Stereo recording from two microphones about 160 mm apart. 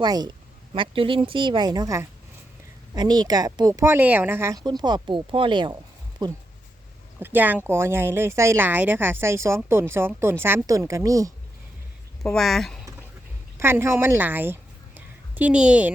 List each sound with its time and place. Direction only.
0.0 s a woman's voice: 25° right (ahead or behind)
4.6 s speech: 25° right (ahead or behind)
7.2 s speech: 10° right (ahead or behind)
12.2 s speech: centre (ahead or behind)
13.6 s speech: 15° right (ahead or behind)